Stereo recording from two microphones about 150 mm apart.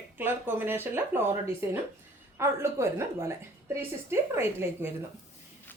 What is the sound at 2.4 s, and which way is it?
Speech, 15° right (ahead or behind).